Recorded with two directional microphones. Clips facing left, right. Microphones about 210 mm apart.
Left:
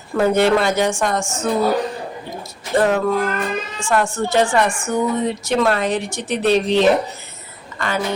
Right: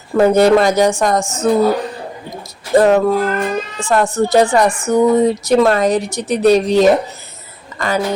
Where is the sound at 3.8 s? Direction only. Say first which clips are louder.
Right 5 dB; 35° right (ahead or behind).